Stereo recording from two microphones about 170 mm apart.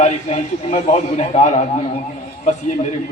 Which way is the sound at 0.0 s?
40° left (ahead or behind).